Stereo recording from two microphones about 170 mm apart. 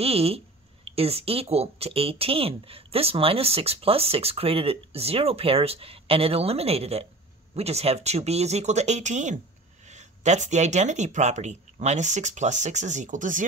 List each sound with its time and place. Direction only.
0.0 s speech: 35° right (ahead or behind)